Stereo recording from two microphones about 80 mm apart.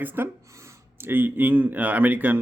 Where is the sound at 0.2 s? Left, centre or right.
Right.